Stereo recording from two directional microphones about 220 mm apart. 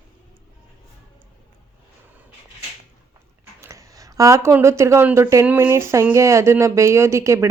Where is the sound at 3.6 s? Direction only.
15° right (ahead or behind).